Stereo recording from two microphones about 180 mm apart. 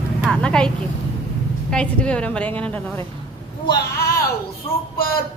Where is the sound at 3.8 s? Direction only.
55° left (ahead or behind).